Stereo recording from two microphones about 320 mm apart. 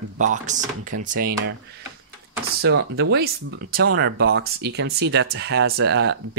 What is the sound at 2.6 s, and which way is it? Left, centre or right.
Speech, right.